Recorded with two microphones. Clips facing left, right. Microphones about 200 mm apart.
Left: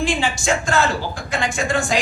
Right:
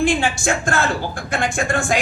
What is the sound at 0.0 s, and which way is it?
Speech, 55° right (ahead or behind).